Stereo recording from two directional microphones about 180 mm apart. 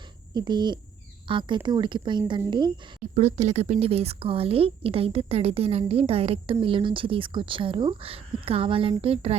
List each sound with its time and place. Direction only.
0.3 s speech: 25° right (ahead or behind)
3.2 s a woman's voice: 40° right (ahead or behind)